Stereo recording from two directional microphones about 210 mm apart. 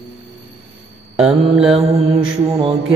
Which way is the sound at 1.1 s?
5° right (ahead or behind).